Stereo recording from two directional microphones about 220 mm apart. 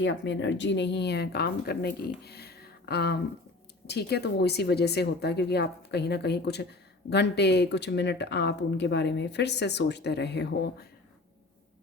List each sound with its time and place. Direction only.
0.0 s speech: 55° left (ahead or behind)